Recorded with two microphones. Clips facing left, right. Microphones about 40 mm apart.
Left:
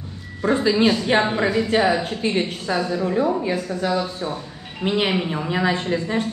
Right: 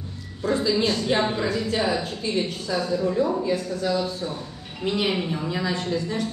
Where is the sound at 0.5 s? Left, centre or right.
Left.